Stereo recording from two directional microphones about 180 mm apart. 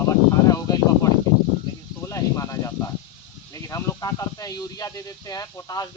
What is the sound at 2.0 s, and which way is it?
Snake, 20° left (ahead or behind).